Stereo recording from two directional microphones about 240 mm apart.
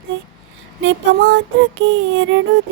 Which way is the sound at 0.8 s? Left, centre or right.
Right.